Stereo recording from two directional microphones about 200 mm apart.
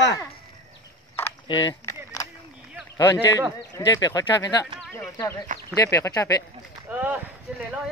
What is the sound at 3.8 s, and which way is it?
Speech, 20° left (ahead or behind).